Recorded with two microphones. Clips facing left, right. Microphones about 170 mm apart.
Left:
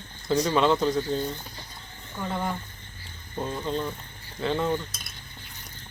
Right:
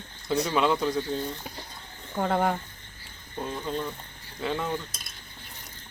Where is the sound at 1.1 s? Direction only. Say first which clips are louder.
Left 3 dB; 30° left (ahead or behind).